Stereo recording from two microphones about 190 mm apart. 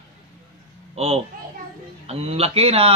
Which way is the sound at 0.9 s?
35° right (ahead or behind).